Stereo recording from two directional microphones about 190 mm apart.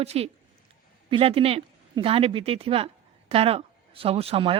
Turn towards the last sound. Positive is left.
turn(degrees=-30)  # may be behind; listen again after turning